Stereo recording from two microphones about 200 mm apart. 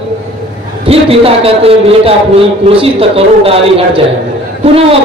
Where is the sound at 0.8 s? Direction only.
30° right (ahead or behind).